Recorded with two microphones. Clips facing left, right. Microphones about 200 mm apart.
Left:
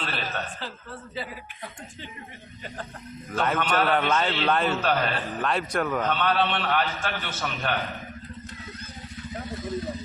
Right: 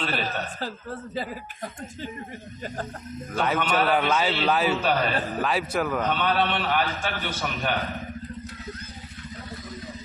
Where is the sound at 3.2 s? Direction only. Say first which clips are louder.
Even; 5° right (ahead or behind).